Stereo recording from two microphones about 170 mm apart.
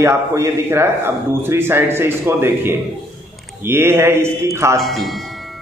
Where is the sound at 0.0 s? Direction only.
15° right (ahead or behind).